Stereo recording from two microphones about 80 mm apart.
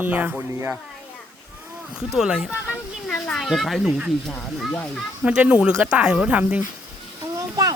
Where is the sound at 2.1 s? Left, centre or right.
Centre.